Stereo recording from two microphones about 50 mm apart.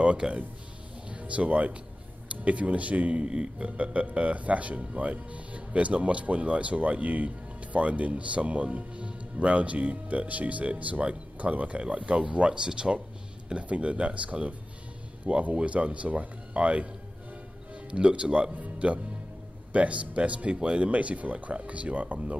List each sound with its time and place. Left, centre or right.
0.0 s speech: right
17.9 s speech: right